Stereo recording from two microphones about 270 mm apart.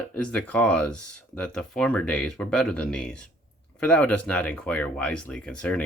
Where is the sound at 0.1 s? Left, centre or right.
Centre.